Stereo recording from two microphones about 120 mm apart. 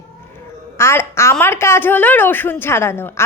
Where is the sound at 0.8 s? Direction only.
20° left (ahead or behind).